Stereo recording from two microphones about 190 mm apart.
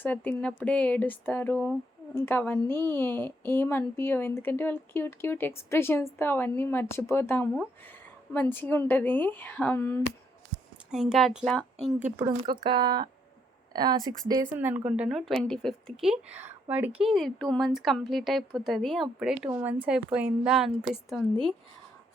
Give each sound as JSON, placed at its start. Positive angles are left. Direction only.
{"t": 0.0, "sound": "a woman's voice", "side_deg": 10}
{"t": 10.9, "sound": "speech", "side_deg": 0}
{"t": 12.1, "sound": "speech", "side_deg": -20}
{"t": 14.5, "sound": "speech", "side_deg": -10}